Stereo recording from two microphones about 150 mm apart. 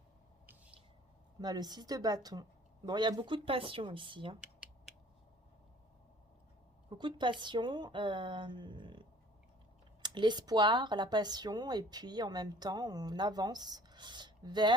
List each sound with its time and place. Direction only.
1.4 s speech: 25° right (ahead or behind)
6.9 s a woman's voice: 30° right (ahead or behind)